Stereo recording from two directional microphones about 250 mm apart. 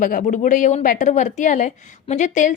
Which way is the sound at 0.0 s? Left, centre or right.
Left.